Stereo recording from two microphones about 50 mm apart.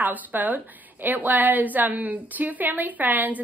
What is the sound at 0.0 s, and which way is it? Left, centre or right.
A woman's voice, right.